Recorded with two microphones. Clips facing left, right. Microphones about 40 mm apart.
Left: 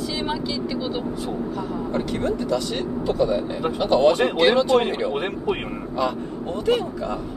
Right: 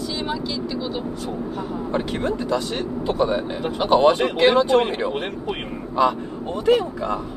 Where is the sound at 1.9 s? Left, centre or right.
Right.